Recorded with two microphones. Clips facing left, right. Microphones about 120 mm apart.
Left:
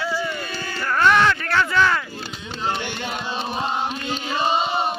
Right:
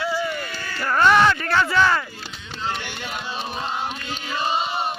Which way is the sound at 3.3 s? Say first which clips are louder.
Left 3 dB; 25° left (ahead or behind).